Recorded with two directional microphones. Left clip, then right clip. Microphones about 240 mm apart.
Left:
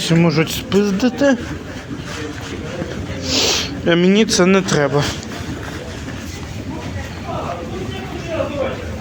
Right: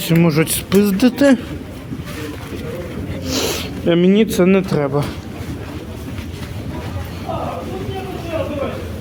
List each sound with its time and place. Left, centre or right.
0.0 s speech: centre
3.2 s speech: centre